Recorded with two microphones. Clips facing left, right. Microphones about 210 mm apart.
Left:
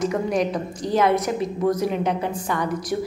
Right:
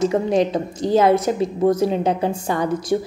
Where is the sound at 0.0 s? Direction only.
25° right (ahead or behind).